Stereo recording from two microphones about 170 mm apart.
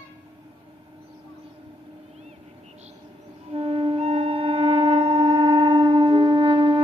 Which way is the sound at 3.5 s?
40° right (ahead or behind).